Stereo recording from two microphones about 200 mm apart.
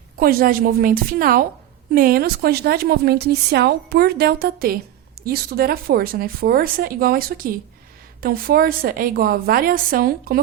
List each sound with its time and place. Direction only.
0.2 s a woman's voice: 50° right (ahead or behind)